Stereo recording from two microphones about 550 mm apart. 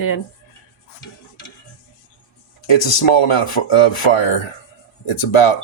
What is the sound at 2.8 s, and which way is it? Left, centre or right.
Speech, left.